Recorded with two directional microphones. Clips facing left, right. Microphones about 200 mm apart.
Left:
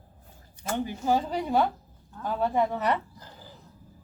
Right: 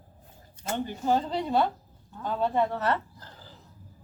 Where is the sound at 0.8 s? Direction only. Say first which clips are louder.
Even; 10° left (ahead or behind).